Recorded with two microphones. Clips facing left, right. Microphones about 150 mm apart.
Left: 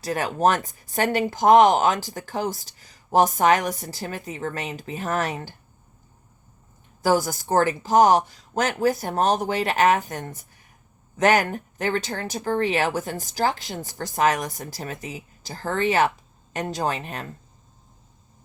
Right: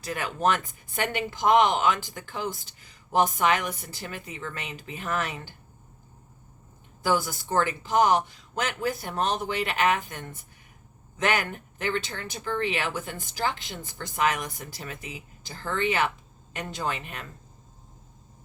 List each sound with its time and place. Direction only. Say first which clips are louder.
0.0 s speech: left 5 dB; 35° left (ahead or behind)
7.0 s speech: left 5 dB; 40° left (ahead or behind)